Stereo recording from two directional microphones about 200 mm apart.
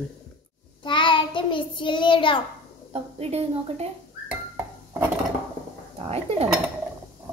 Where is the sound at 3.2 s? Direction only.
30° right (ahead or behind).